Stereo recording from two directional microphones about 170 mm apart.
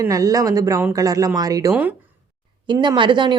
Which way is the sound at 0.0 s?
20° right (ahead or behind).